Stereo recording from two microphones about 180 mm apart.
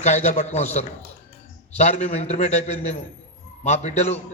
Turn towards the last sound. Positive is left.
turn(degrees=40)  # may be behind; listen again after turning